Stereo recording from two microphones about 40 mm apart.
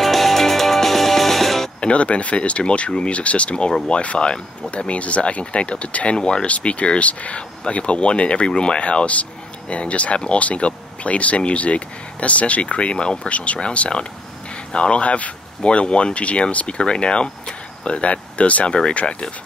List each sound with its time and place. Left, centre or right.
0.0 s music: centre
1.8 s speech: left
6.1 s speech: left
6.4 s speech: left
13.3 s speech: left
18.7 s speech: left